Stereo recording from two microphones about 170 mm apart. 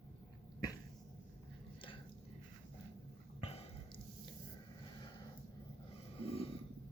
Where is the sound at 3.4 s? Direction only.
35° left (ahead or behind).